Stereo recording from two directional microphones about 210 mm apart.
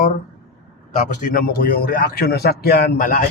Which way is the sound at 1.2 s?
45° left (ahead or behind).